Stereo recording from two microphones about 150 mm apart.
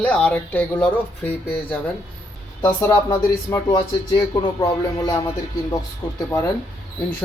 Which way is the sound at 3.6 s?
30° left (ahead or behind).